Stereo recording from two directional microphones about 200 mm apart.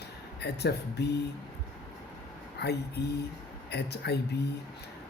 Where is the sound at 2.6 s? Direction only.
55° left (ahead or behind).